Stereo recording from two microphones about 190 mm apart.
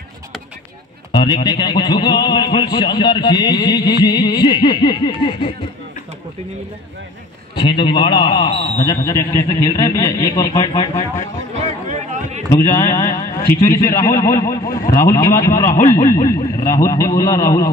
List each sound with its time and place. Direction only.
1.1 s a man's voice: 25° left (ahead or behind)
7.5 s a man's voice: 25° left (ahead or behind)
9.0 s a man's voice: 15° left (ahead or behind)
11.9 s a sound: 40° right (ahead or behind)
12.7 s speech: 15° left (ahead or behind)